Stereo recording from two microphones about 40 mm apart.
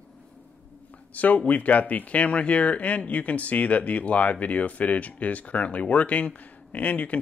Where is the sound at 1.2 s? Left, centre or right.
Left.